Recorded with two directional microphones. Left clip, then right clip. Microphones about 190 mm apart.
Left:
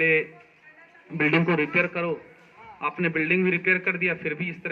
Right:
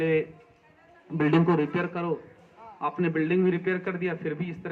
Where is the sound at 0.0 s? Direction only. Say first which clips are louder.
Left 4 dB; 65° right (ahead or behind).